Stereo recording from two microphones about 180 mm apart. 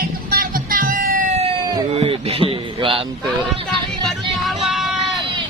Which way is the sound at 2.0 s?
35° right (ahead or behind).